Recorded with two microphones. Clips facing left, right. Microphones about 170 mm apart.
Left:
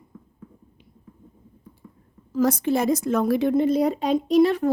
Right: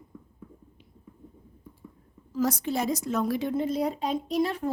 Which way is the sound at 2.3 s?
60° left (ahead or behind).